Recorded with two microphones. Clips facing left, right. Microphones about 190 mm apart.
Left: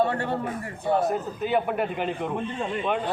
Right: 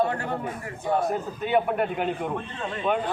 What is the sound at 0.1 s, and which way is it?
Speech, 35° left (ahead or behind).